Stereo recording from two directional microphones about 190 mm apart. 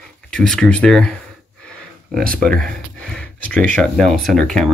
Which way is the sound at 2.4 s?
5° left (ahead or behind).